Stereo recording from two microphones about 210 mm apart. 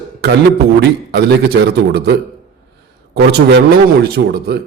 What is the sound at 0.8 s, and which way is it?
A man's voice, 50° right (ahead or behind).